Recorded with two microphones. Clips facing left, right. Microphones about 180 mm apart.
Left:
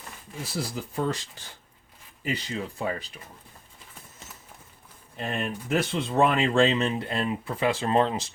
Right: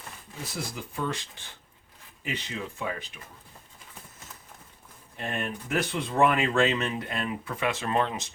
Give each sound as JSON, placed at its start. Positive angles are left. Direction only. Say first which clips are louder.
{"t": 0.5, "sound": "speech", "louder": "left 5 dB", "side_deg": 40}
{"t": 2.2, "sound": "speech", "louder": "left 4 dB", "side_deg": 35}
{"t": 5.1, "sound": "speech", "louder": "left 2 dB", "side_deg": 30}